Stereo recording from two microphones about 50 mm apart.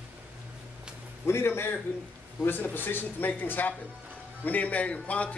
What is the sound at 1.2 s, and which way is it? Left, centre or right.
A man's voice, left.